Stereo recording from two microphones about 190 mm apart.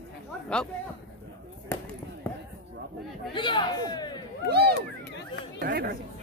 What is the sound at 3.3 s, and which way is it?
Speech, 25° left (ahead or behind).